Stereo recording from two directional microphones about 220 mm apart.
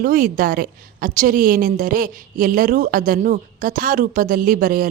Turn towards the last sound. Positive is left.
turn(degrees=-40)  # may be behind; listen again after turning